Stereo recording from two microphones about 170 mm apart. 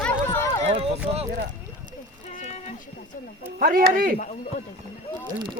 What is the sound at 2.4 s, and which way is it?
Rowboat, 40° left (ahead or behind).